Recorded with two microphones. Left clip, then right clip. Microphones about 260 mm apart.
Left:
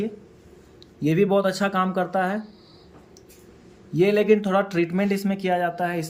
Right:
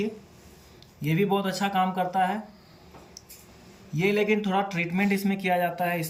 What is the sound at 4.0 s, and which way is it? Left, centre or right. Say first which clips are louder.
Speech: left 6 dB; left.